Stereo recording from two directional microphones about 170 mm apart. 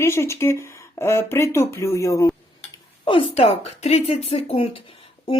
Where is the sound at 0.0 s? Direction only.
15° left (ahead or behind).